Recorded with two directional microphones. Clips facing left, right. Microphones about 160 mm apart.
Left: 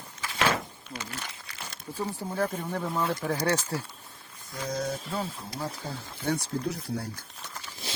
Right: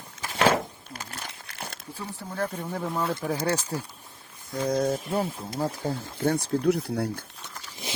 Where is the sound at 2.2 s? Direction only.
25° left (ahead or behind).